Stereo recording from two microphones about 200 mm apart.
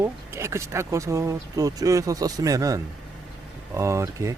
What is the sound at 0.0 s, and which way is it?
Speech, 15° right (ahead or behind).